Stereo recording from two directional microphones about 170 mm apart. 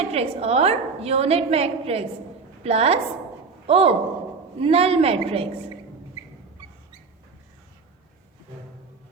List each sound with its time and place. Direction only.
0.0 s a woman's voice: 35° right (ahead or behind)